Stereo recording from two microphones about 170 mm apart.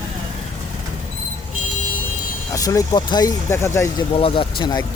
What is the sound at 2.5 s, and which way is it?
Speech, 20° left (ahead or behind).